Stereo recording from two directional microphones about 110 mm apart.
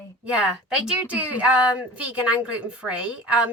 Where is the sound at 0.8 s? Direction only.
10° right (ahead or behind).